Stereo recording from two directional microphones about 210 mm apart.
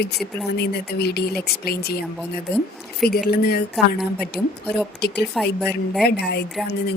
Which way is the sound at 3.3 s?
50° left (ahead or behind).